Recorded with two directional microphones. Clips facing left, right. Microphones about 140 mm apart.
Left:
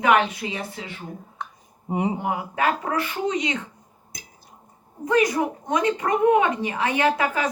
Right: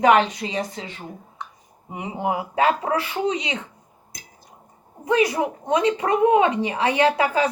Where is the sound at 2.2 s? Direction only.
25° right (ahead or behind).